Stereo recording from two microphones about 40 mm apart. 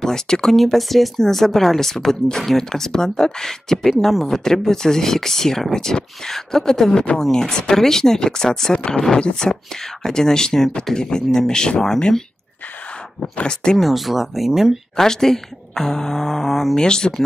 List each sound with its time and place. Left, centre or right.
0.0 s speech: centre
0.6 s speech: centre
9.4 s speech: left
13.4 s speech: left
13.7 s speech: centre
15.0 s speech: centre
16.7 s speech: centre